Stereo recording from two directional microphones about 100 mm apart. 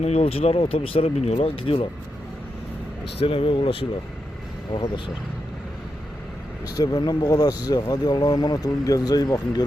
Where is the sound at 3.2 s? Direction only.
65° left (ahead or behind).